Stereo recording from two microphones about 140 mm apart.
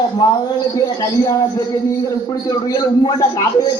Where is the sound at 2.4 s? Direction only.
25° left (ahead or behind).